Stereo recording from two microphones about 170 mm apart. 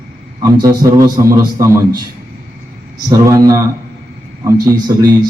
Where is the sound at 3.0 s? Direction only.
20° right (ahead or behind).